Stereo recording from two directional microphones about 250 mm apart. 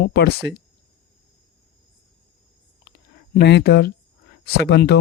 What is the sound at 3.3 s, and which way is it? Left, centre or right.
Speech, left.